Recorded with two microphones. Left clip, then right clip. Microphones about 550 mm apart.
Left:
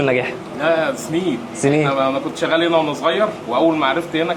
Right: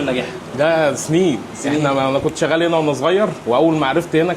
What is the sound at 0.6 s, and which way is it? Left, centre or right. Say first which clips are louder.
Speech: right 2 dB; right.